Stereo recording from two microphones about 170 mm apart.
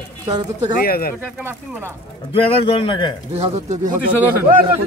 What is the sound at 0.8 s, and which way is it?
Speech, 60° left (ahead or behind).